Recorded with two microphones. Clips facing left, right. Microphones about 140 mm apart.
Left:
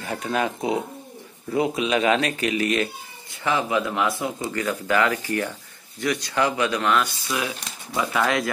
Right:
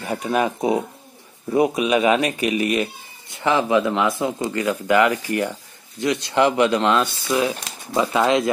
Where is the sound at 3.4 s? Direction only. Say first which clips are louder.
Right 5 dB; 25° right (ahead or behind).